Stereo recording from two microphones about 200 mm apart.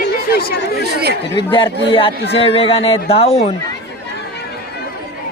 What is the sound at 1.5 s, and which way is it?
A man's voice, 25° left (ahead or behind).